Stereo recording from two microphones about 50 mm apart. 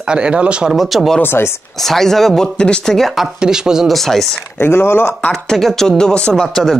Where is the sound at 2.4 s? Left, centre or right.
Centre.